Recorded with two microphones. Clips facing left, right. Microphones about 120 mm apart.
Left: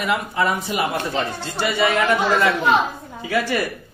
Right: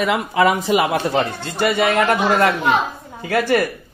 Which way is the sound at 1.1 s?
50° right (ahead or behind).